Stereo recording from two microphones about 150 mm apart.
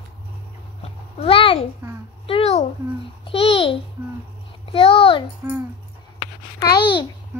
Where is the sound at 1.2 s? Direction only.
35° left (ahead or behind).